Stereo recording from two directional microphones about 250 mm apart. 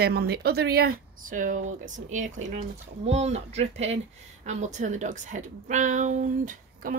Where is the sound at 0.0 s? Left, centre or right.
Right.